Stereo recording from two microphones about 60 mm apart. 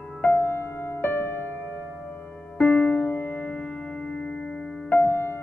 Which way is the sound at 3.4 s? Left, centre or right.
Centre.